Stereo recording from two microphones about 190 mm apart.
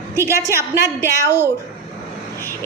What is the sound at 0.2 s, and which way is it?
A woman's voice, 15° right (ahead or behind).